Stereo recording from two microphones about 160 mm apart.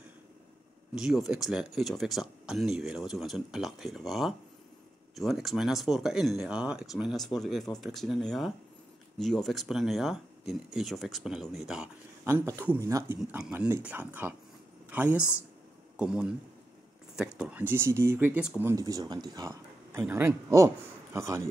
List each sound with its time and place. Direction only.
0.9 s speech: 5° right (ahead or behind)
12.3 s speech: 15° right (ahead or behind)
16.0 s speech: 5° right (ahead or behind)